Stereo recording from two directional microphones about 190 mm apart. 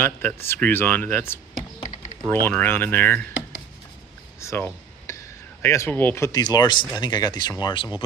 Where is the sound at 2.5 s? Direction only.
10° left (ahead or behind).